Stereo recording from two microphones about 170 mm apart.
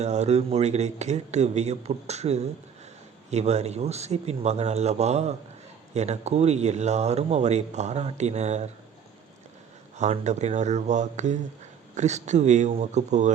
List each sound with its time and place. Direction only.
0.0 s speech: 40° right (ahead or behind)
10.0 s a man's voice: 40° right (ahead or behind)